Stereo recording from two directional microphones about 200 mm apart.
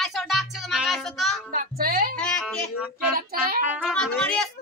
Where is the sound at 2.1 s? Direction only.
5° left (ahead or behind).